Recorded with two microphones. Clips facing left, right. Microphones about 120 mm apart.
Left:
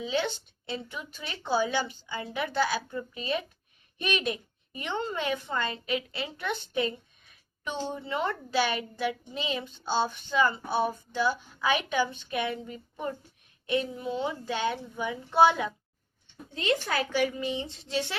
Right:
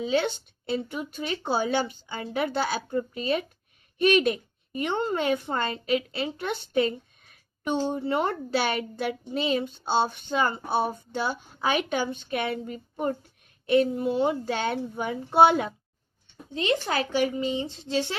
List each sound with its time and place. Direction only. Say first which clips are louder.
0.0 s speech: right 4 dB; 40° right (ahead or behind)
2.2 s speech: right 2 dB; 35° right (ahead or behind)
4.8 s speech: right 5 dB; 45° right (ahead or behind)
5.9 s speech: right 6 dB; 30° right (ahead or behind)
7.7 s speech: right 7 dB; 45° right (ahead or behind)
16.8 s a woman's voice: right 2 dB; 25° right (ahead or behind)